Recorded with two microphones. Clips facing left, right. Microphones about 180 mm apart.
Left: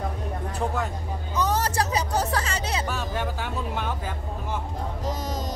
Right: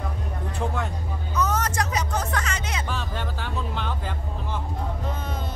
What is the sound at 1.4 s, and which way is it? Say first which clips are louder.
Music: left 1 dB; 35° left (ahead or behind).